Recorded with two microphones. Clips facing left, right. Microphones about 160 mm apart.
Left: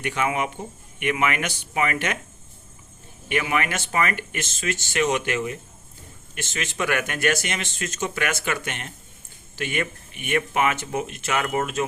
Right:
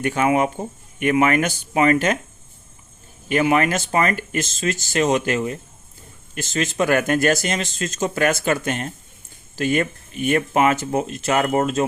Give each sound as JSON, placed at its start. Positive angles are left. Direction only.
{"t": 0.0, "sound": "speech", "side_deg": -40}
{"t": 3.5, "sound": "speech", "side_deg": -40}